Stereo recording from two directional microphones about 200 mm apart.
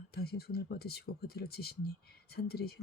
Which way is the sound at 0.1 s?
50° left (ahead or behind).